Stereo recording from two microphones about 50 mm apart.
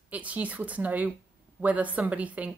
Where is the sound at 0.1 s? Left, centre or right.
Right.